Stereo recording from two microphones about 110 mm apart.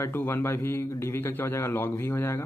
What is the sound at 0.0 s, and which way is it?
A man's voice, 20° left (ahead or behind).